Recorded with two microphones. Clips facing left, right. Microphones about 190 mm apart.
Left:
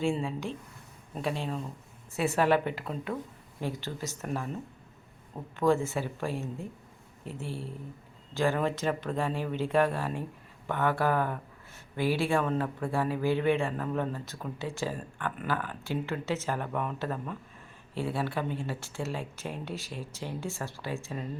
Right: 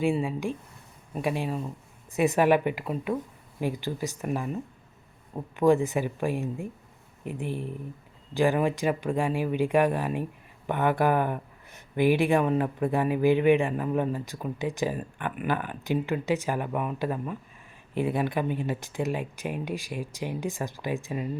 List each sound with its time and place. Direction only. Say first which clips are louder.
0.0 s speech: right 4 dB; 15° right (ahead or behind)